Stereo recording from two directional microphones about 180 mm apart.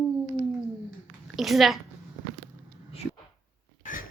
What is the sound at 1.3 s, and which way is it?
Speech, centre (ahead or behind).